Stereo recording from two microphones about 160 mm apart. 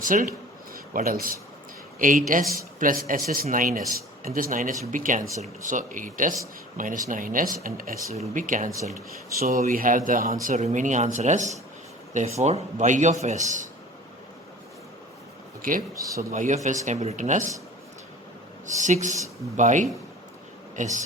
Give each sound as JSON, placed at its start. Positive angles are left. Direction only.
{"t": 0.0, "sound": "speech", "side_deg": -55}
{"t": 8.1, "sound": "speech", "side_deg": -50}
{"t": 10.4, "sound": "speech", "side_deg": -45}
{"t": 15.6, "sound": "speech", "side_deg": -65}
{"t": 16.0, "sound": "speech", "side_deg": -20}
{"t": 16.3, "sound": "speech", "side_deg": -55}
{"t": 18.8, "sound": "speech", "side_deg": -50}